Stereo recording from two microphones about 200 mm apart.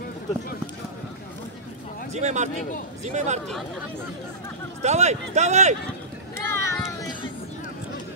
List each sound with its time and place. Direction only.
2.1 s speech: 35° right (ahead or behind)
4.8 s speech: 35° right (ahead or behind)
6.3 s a sound: 15° left (ahead or behind)